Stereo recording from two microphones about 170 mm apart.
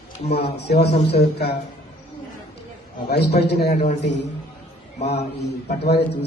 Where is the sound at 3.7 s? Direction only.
45° left (ahead or behind).